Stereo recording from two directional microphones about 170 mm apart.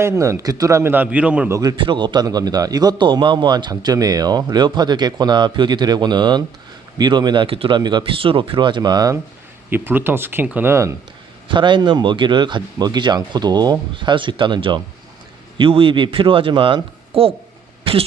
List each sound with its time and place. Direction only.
0.0 s a man's voice: 15° right (ahead or behind)
1.5 s a man's voice: 25° right (ahead or behind)
9.6 s a man's voice: 10° right (ahead or behind)
11.4 s a man's voice: 30° right (ahead or behind)